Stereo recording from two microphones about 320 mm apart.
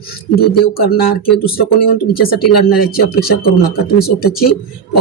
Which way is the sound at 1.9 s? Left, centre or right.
Left.